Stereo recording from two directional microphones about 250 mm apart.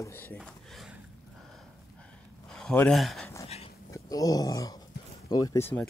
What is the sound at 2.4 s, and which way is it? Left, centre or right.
Speech, centre.